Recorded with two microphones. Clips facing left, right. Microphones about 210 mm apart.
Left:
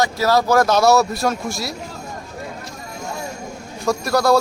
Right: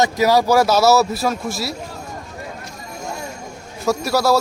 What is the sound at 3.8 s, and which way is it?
Speech, 5° right (ahead or behind).